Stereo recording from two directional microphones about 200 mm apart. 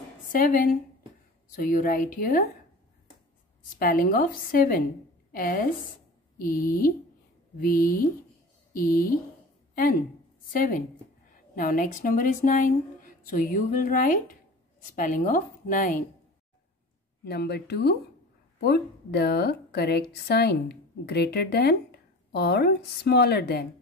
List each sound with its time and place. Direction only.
0.3 s speech: 45° left (ahead or behind)
3.7 s speech: 45° left (ahead or behind)
10.5 s speech: 45° left (ahead or behind)
17.2 s a woman's voice: 55° left (ahead or behind)